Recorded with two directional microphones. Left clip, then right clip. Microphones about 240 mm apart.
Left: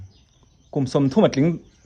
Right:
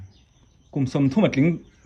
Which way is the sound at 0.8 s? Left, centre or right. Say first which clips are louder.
Left 3 dB; centre.